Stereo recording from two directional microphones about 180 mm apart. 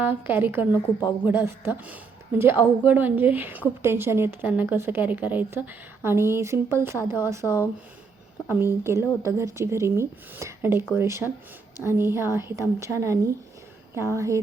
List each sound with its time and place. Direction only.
0.0 s speech: 10° right (ahead or behind)
8.4 s speech: 10° right (ahead or behind)